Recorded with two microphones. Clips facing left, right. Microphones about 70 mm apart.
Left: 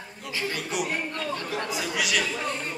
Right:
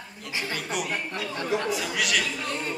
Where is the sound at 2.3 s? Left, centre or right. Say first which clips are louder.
Left 2 dB; left.